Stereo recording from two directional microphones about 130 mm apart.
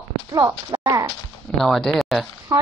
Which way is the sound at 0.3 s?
30° right (ahead or behind).